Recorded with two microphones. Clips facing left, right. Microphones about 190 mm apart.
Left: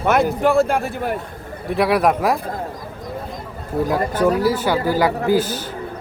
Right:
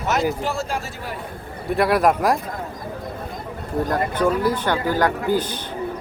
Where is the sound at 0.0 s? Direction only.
55° left (ahead or behind).